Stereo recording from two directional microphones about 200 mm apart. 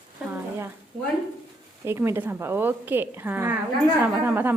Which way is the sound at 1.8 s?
15° right (ahead or behind).